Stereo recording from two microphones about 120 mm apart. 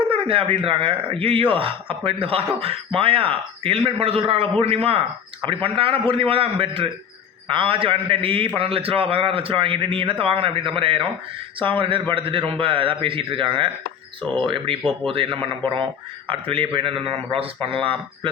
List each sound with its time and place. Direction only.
0.1 s speech: 50° right (ahead or behind)